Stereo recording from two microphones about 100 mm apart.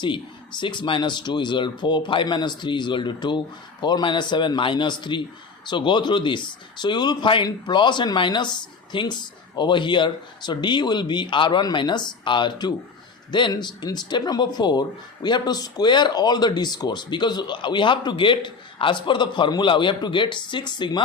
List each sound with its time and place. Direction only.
0.6 s speech: 50° left (ahead or behind)